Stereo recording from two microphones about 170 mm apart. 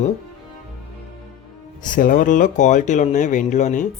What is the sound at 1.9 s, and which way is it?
Speech, 50° left (ahead or behind).